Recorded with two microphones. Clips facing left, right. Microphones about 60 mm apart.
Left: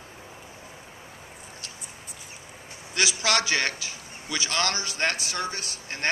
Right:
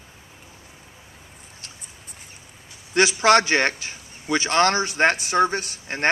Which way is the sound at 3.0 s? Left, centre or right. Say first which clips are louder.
Right 9 dB; right.